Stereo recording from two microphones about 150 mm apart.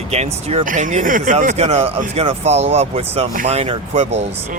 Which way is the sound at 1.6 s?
40° right (ahead or behind).